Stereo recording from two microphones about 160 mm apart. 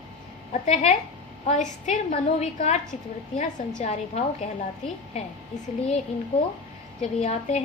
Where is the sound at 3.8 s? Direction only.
45° left (ahead or behind).